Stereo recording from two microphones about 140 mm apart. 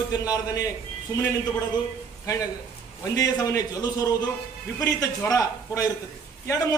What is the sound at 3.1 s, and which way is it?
A man's voice, 25° left (ahead or behind).